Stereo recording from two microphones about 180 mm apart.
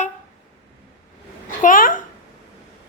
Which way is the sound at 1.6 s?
50° left (ahead or behind).